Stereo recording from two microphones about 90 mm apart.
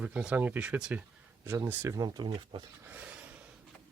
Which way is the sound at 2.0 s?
55° right (ahead or behind).